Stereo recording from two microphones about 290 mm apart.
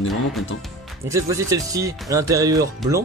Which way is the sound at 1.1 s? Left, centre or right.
Centre.